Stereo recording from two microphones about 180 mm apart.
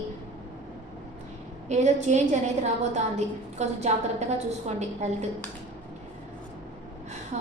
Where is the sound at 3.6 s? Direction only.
40° right (ahead or behind).